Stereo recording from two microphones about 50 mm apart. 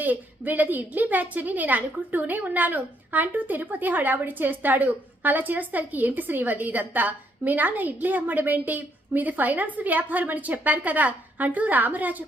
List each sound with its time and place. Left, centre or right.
0.0 s a woman's voice: right